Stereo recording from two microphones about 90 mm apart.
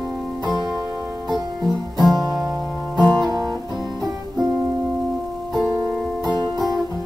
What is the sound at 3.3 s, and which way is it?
Music, 45° right (ahead or behind).